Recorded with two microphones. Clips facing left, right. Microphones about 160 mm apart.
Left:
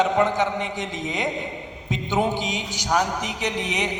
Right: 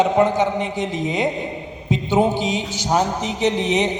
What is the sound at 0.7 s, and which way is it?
Speech, 20° left (ahead or behind).